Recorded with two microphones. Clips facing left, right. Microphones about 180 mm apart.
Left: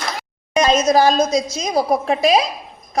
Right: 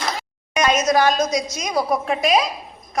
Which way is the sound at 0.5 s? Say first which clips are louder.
Left 3 dB; 30° left (ahead or behind).